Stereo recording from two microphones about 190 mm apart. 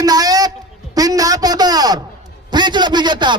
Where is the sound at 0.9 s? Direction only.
20° right (ahead or behind).